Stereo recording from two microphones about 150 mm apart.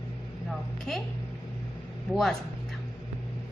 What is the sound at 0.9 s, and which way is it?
Speech, 5° left (ahead or behind).